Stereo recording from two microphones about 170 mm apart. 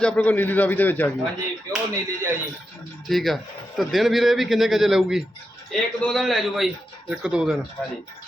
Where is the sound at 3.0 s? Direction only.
Centre (ahead or behind).